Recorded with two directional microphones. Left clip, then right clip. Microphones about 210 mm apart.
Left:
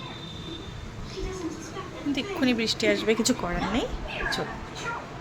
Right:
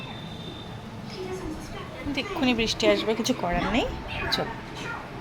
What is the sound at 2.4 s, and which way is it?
Speech, 10° left (ahead or behind).